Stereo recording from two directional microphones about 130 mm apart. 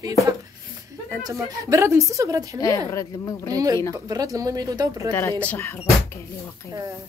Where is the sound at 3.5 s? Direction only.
30° right (ahead or behind).